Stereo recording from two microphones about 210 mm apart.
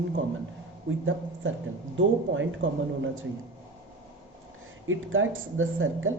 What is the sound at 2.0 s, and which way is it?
Speech, 65° right (ahead or behind).